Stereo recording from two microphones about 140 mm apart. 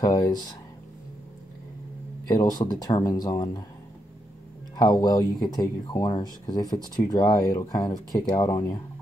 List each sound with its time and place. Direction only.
0.0 s speech: 30° left (ahead or behind)
2.2 s speech: 25° left (ahead or behind)
4.7 s speech: 30° left (ahead or behind)